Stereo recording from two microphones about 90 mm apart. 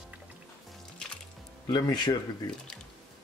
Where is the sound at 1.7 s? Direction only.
55° left (ahead or behind).